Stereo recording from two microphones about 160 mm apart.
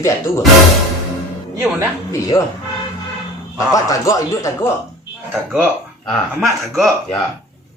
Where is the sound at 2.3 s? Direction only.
15° left (ahead or behind).